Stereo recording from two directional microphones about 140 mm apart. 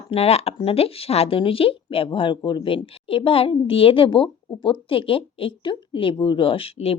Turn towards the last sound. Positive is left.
turn(degrees=45)  # may be behind; listen again after turning